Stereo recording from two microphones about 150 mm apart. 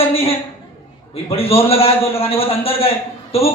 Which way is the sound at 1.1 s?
40° left (ahead or behind).